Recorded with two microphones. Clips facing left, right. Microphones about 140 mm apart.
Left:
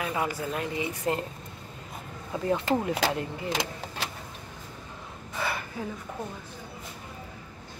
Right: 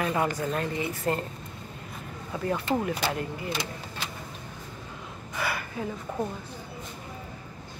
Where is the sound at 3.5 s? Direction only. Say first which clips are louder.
Left 2 dB; 90° left.